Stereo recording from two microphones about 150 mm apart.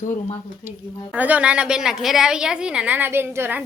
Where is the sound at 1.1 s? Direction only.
10° right (ahead or behind).